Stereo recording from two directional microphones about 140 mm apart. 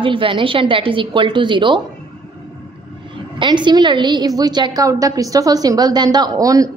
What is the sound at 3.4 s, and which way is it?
A woman's voice, 35° right (ahead or behind).